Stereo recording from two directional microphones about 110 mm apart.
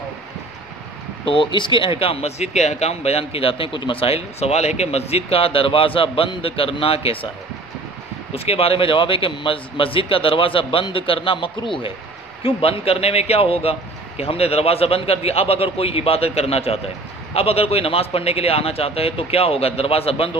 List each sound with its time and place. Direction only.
1.2 s speech: 50° left (ahead or behind)
8.3 s a man's voice: 65° left (ahead or behind)